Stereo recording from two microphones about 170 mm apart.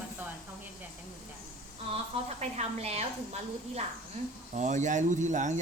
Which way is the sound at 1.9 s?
40° right (ahead or behind).